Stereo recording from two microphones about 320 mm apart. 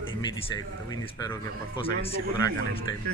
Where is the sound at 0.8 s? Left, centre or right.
Centre.